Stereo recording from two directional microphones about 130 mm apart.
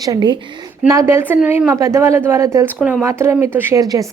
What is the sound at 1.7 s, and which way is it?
A woman's voice, 25° right (ahead or behind).